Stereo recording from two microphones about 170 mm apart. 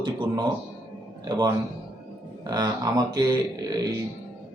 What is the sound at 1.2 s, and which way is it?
Speech, 25° right (ahead or behind).